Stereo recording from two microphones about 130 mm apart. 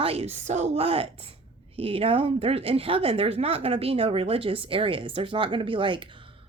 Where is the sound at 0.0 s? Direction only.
50° right (ahead or behind).